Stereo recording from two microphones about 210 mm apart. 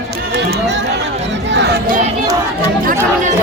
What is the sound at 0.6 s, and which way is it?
Speech, 55° right (ahead or behind).